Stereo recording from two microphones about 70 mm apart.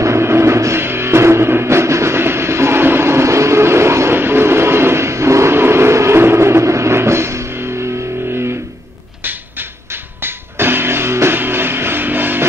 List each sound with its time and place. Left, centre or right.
0.0 s music: right
9.2 s music: right